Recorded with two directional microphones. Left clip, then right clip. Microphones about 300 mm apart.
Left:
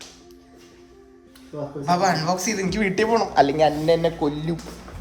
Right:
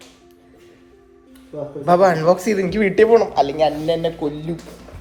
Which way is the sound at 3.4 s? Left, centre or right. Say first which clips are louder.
Even; left.